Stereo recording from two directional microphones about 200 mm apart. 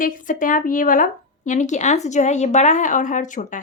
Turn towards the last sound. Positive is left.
turn(degrees=40)  # may be behind; listen again after turning